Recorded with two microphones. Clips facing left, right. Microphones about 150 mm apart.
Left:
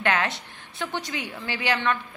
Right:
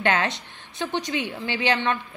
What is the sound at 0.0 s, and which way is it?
Speech, 25° right (ahead or behind).